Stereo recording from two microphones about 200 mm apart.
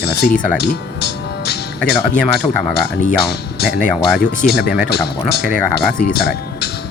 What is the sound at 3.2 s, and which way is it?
Speech, 55° left (ahead or behind).